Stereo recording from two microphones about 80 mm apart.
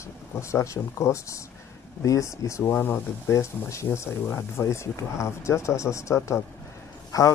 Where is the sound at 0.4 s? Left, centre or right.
Left.